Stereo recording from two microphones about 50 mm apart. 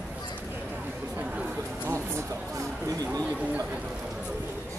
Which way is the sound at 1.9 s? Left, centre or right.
Right.